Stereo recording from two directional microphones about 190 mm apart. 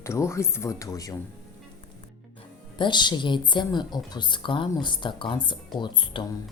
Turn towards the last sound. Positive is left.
turn(degrees=25)  # may be behind; listen again after turning